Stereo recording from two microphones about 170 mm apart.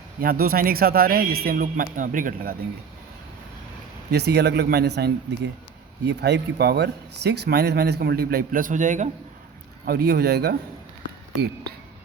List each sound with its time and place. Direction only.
0.2 s speech: 60° right (ahead or behind)
4.1 s speech: 75° right (ahead or behind); by 9.0 s 45° right (ahead or behind)
9.8 s speech: 65° right (ahead or behind)